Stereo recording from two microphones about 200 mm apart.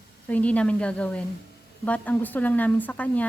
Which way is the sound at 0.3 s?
5° left (ahead or behind).